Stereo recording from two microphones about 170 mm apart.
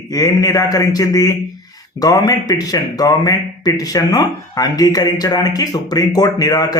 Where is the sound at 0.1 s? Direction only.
20° left (ahead or behind).